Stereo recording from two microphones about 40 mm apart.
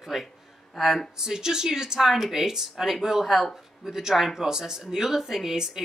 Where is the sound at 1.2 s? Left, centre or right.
Centre.